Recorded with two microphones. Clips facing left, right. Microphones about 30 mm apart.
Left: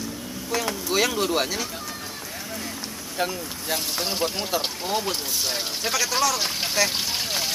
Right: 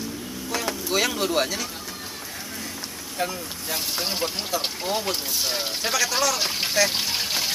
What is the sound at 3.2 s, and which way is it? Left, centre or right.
Speech, centre.